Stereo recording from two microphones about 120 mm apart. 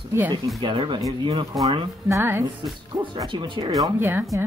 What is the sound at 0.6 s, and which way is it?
Speech, 40° right (ahead or behind).